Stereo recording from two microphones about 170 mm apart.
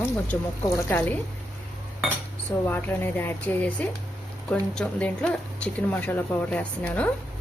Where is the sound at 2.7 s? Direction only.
10° left (ahead or behind).